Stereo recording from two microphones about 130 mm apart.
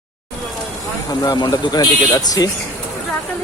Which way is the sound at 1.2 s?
30° left (ahead or behind).